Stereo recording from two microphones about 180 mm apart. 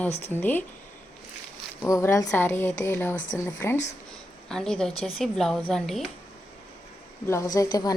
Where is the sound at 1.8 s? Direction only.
15° left (ahead or behind).